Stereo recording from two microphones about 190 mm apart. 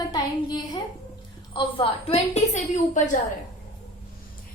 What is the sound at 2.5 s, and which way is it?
Speech, 40° left (ahead or behind).